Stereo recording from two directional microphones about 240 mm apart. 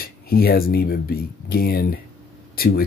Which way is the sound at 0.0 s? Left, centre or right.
Left.